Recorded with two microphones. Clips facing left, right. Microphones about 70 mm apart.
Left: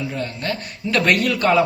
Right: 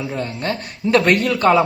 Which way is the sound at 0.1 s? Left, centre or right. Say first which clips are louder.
Right 2 dB; right.